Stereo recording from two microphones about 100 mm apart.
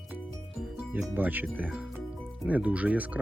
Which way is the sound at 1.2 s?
15° right (ahead or behind).